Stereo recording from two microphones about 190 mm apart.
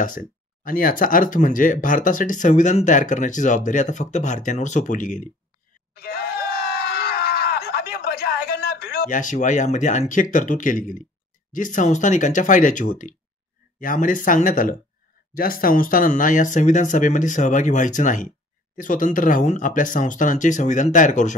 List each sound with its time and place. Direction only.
0.0 s speech: 45° left (ahead or behind)
5.9 s screaming: 55° left (ahead or behind)
11.5 s speech: 40° left (ahead or behind)